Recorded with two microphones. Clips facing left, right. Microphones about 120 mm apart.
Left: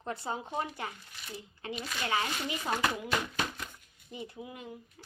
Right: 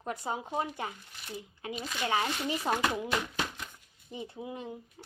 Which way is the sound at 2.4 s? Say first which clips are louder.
Right 4 dB; 30° right (ahead or behind).